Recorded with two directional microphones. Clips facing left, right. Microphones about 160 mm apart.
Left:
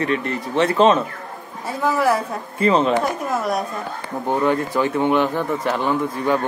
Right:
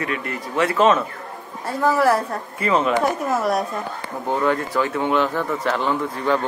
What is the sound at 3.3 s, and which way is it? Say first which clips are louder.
Speech: even; 5° right (ahead or behind).